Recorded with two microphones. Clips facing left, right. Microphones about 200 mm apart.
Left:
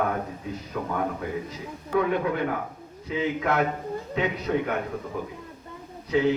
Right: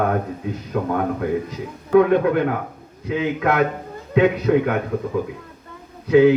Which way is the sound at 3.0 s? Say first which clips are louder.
Right 5 dB; 80° right.